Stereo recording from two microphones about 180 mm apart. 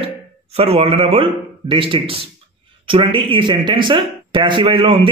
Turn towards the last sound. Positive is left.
turn(degrees=-30)  # may be behind; listen again after turning